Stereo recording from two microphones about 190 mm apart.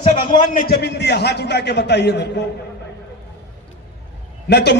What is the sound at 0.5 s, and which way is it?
A man's voice, 60° left (ahead or behind).